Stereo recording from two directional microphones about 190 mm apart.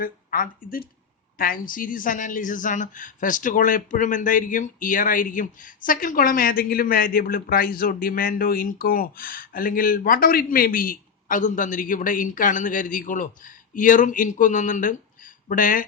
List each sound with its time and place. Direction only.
0.0 s a woman's voice: 50° left (ahead or behind)